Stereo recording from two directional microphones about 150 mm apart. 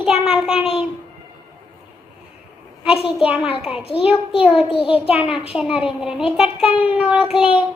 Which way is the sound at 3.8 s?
40° left (ahead or behind).